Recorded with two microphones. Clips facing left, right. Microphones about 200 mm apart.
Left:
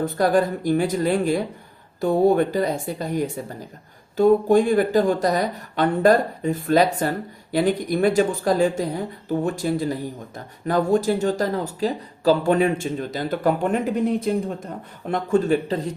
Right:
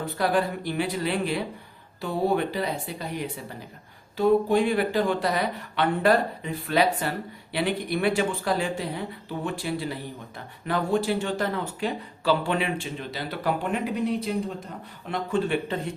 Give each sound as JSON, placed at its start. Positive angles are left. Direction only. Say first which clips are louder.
{"t": 0.0, "sound": "speech", "louder": "left 6 dB", "side_deg": 45}